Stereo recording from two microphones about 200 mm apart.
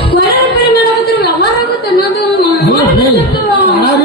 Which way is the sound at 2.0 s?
50° left (ahead or behind).